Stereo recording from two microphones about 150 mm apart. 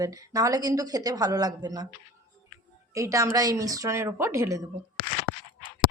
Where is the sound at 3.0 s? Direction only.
20° right (ahead or behind).